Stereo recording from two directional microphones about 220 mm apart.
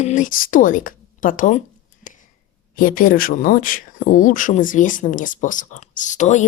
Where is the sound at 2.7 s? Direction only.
40° left (ahead or behind).